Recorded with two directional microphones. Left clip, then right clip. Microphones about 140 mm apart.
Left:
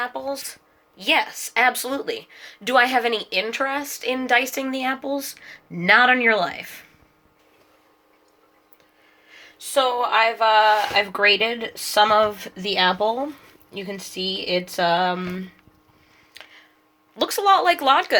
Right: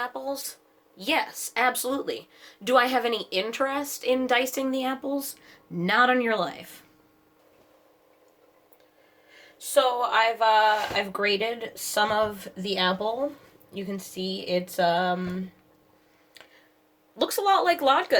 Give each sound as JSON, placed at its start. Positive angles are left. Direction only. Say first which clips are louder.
{"t": 0.0, "sound": "speech", "louder": "left 4 dB", "side_deg": 25}
{"t": 0.9, "sound": "a woman's voice", "louder": "left 6 dB", "side_deg": 5}
{"t": 9.3, "sound": "speech", "louder": "left 1 dB", "side_deg": 35}
{"t": 16.3, "sound": "a sound", "louder": "left 7 dB", "side_deg": 5}
{"t": 17.2, "sound": "speech", "louder": "left 5 dB", "side_deg": 5}